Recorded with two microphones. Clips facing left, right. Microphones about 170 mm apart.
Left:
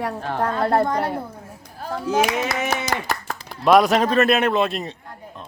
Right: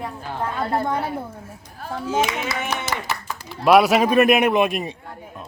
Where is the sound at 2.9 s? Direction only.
55° left (ahead or behind).